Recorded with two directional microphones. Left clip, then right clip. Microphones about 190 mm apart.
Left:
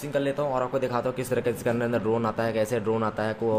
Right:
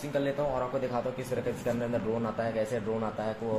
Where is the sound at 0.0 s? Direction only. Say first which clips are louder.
Left 3 dB; 40° left (ahead or behind).